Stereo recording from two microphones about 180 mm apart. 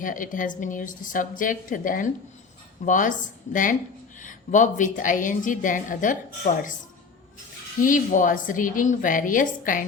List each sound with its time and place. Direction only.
0.0 s a woman's voice: 50° left (ahead or behind)
7.8 s a woman's voice: 45° left (ahead or behind)